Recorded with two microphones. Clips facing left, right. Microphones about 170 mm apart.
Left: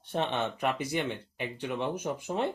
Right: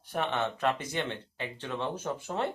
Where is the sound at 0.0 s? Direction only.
25° left (ahead or behind).